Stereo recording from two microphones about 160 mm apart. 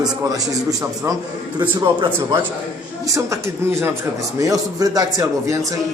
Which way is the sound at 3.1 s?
20° right (ahead or behind).